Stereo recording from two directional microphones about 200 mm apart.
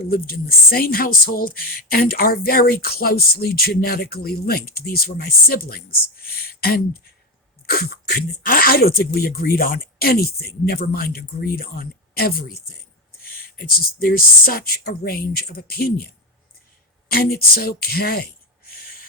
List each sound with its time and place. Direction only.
0.0 s speech: 50° left (ahead or behind)